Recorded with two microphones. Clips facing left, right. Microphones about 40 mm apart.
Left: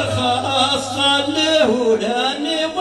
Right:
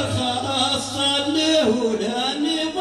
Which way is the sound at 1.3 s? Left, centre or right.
Left.